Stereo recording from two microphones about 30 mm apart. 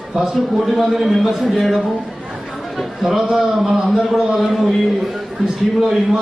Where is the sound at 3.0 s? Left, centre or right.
Centre.